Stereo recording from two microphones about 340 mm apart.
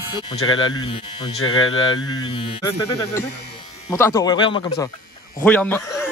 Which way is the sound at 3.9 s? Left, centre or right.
Centre.